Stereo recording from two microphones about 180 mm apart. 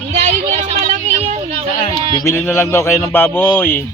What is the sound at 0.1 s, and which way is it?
Vehicle, 40° right (ahead or behind).